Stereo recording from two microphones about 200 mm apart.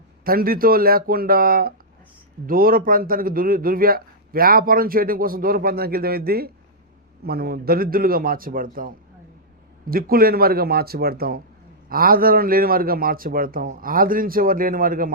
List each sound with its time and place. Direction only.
0.3 s a man's voice: 45° right (ahead or behind)
9.9 s a man's voice: 50° right (ahead or behind)